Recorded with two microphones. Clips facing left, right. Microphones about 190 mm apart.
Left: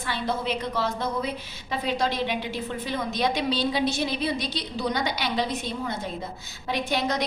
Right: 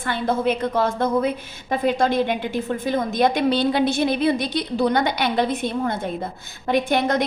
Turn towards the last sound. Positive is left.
turn(degrees=-55)  # may be behind; listen again after turning